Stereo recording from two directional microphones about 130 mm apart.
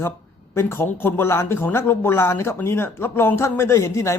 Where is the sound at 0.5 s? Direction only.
20° left (ahead or behind).